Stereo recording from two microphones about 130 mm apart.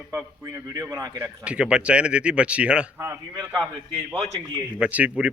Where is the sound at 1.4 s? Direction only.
10° right (ahead or behind).